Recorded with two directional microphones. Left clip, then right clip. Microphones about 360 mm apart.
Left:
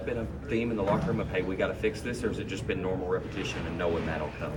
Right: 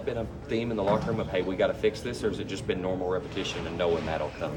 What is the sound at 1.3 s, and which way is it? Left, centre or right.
Speech, right.